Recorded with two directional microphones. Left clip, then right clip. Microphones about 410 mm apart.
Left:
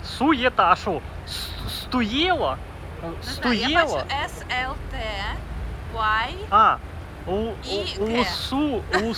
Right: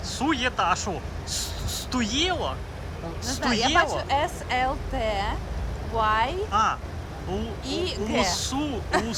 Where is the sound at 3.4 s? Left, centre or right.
Right.